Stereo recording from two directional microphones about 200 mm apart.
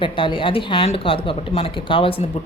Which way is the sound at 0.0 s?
25° left (ahead or behind).